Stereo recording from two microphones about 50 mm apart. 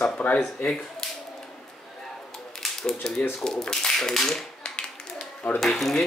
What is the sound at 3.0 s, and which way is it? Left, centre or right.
Speech, centre.